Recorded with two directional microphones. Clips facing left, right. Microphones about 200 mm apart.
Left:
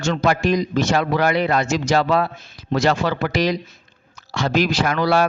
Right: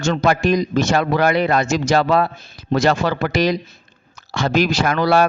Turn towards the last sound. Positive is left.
turn(degrees=-50)  # may be behind; listen again after turning